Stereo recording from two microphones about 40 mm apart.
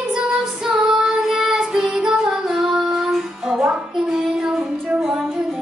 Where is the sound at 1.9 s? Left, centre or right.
Centre.